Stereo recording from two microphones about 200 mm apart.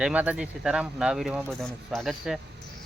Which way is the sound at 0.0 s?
5° right (ahead or behind).